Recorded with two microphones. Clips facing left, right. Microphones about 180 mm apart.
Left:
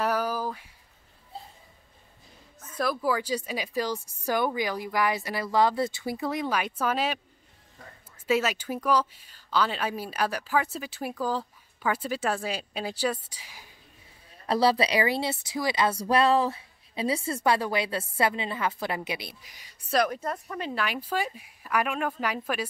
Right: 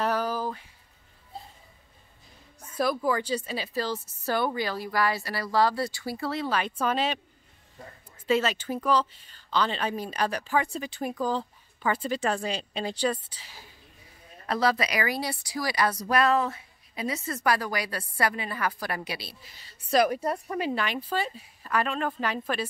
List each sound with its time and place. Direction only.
0.0 s a sound: 10° left (ahead or behind)
2.7 s speech: centre (ahead or behind)
8.3 s speech: 10° left (ahead or behind)
14.5 s a woman's voice: 30° left (ahead or behind)
19.9 s a woman's voice: 5° right (ahead or behind)
20.7 s speech: 5° left (ahead or behind)